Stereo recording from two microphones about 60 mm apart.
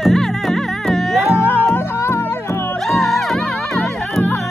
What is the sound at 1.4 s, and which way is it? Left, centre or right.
Music, left.